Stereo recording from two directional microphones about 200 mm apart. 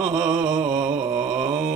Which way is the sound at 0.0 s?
5° right (ahead or behind).